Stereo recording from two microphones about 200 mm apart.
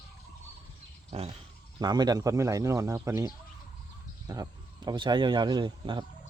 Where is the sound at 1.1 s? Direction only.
30° right (ahead or behind).